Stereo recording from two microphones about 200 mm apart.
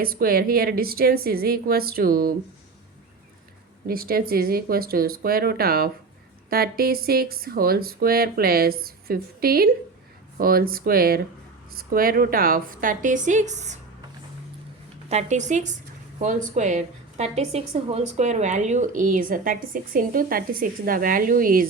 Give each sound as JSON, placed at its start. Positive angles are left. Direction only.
{"t": 0.0, "sound": "speech", "side_deg": -45}
{"t": 3.8, "sound": "speech", "side_deg": -45}
{"t": 15.1, "sound": "a woman's voice", "side_deg": -35}